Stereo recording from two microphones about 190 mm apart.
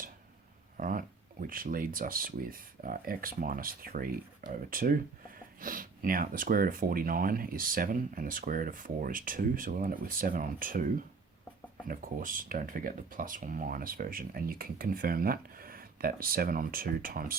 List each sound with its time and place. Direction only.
0.8 s speech: 45° right (ahead or behind)
11.9 s speech: 45° right (ahead or behind)